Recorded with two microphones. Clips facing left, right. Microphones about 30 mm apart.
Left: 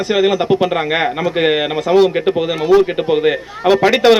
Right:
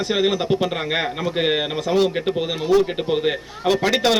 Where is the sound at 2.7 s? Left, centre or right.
Centre.